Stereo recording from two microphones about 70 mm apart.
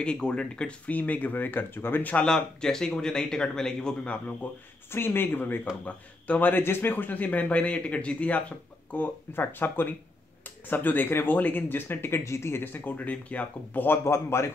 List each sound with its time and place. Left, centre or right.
0.0 s speech: centre
2.2 s speech: centre
4.9 s speech: left
14.0 s speech: left